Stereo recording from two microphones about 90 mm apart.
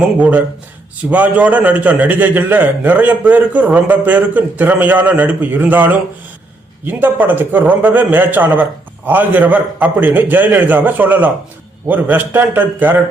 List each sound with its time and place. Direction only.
0.2 s a man's voice: 15° right (ahead or behind)